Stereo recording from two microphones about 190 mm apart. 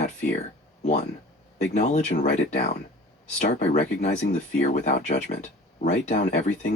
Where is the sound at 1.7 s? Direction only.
40° left (ahead or behind).